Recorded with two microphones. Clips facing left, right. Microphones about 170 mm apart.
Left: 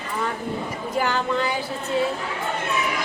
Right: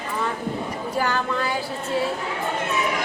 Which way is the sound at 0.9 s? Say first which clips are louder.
Left 1 dB; 15° left (ahead or behind).